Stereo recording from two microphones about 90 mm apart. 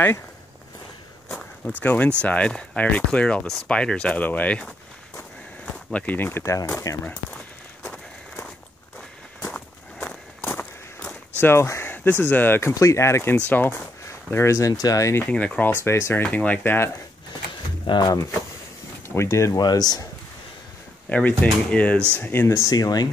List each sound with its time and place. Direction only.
1.8 s speech: 15° left (ahead or behind)
5.9 s speech: 15° left (ahead or behind)
7.1 s a sound: 15° left (ahead or behind)
10.4 s a sound: 25° left (ahead or behind)
11.3 s speech: 25° left (ahead or behind)
14.0 s speech: 35° left (ahead or behind)
15.3 s speech: 15° left (ahead or behind)
15.8 s speech: 30° left (ahead or behind)
16.2 s speech: 15° left (ahead or behind)
17.8 s speech: 55° left (ahead or behind)
19.0 s speech: 30° left (ahead or behind)
19.6 s speech: 45° left (ahead or behind)
21.1 s speech: 15° left (ahead or behind)
22.7 s speech: 45° left (ahead or behind)